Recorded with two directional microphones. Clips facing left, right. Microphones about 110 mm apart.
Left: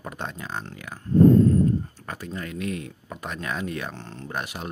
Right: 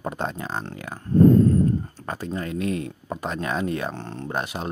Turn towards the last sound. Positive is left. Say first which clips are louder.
# right 4 dB
turn(degrees=-30)  # may be behind; listen again after turning